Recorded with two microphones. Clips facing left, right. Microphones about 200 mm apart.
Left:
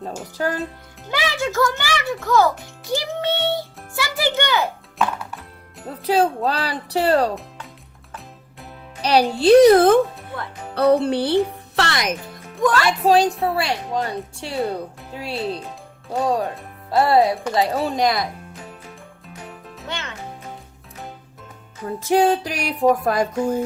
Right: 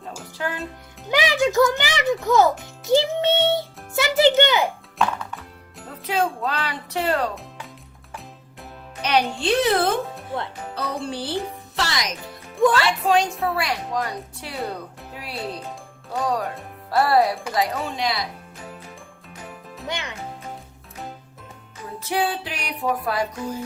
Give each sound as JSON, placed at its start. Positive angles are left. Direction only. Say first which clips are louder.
{"t": 0.3, "sound": "speech", "louder": "left 5 dB", "side_deg": 40}
{"t": 1.1, "sound": "a child's voice", "louder": "right 4 dB", "side_deg": -15}
{"t": 4.9, "sound": "music", "louder": "left 1 dB", "side_deg": 0}
{"t": 6.0, "sound": "speech", "louder": "left 5 dB", "side_deg": 35}
{"t": 9.0, "sound": "speech", "louder": "left 4 dB", "side_deg": 35}
{"t": 10.8, "sound": "speech", "louder": "left 12 dB", "side_deg": 60}
{"t": 13.1, "sound": "speech", "louder": "left 5 dB", "side_deg": 35}
{"t": 13.3, "sound": "a woman's voice", "louder": "left 3 dB", "side_deg": 0}
{"t": 13.6, "sound": "speech", "louder": "left 2 dB", "side_deg": 30}
{"t": 19.9, "sound": "a child's voice", "louder": "right 1 dB", "side_deg": -15}
{"t": 22.0, "sound": "music", "louder": "left 8 dB", "side_deg": 45}